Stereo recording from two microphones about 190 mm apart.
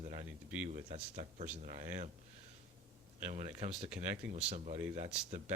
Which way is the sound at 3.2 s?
35° right (ahead or behind).